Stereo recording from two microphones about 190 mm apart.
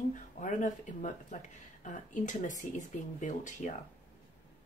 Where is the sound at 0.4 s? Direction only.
45° left (ahead or behind).